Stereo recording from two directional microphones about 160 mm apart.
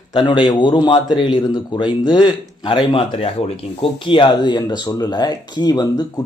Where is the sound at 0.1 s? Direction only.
30° left (ahead or behind).